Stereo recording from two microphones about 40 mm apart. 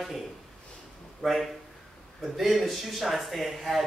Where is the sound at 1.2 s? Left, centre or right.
Centre.